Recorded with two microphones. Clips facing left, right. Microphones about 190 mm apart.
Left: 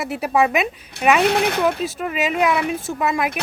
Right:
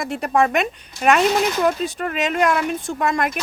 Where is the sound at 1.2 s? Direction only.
60° left (ahead or behind).